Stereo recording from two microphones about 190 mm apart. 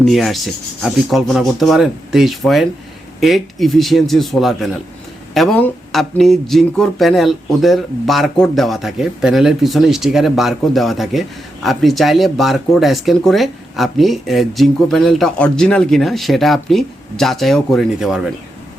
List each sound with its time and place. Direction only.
0.0 s speech: centre (ahead or behind)